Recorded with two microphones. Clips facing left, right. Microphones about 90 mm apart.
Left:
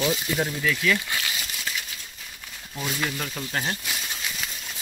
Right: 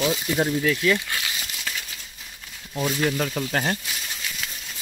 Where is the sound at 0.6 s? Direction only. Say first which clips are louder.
Right 1 dB; 30° right (ahead or behind).